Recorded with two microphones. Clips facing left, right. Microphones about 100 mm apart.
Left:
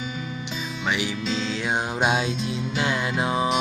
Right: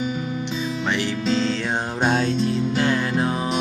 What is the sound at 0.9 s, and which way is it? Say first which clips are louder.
Music: right 2 dB; 10° left (ahead or behind).